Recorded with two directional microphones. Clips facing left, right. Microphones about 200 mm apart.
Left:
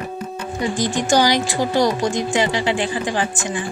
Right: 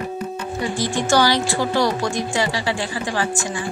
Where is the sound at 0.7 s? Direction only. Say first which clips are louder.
Left 1 dB; 15° left (ahead or behind).